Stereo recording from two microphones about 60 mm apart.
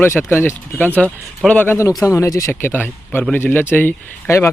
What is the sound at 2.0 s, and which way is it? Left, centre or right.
Speech, left.